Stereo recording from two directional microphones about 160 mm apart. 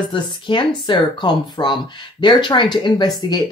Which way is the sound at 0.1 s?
30° left (ahead or behind).